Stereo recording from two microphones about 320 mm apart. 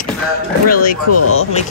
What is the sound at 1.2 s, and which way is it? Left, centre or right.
Speech, left.